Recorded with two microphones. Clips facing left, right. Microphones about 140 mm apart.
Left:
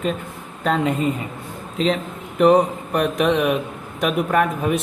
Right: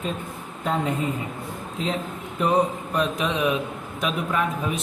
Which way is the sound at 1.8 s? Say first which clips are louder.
Left 8 dB; 90° left.